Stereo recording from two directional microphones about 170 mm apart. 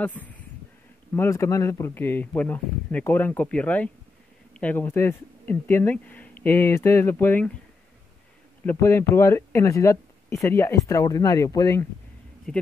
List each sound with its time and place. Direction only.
0.0 s speech: 10° left (ahead or behind)
8.6 s speech: 15° left (ahead or behind)
12.5 s speech: 5° left (ahead or behind)